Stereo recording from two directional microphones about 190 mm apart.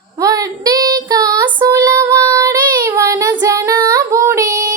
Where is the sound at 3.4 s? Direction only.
15° right (ahead or behind).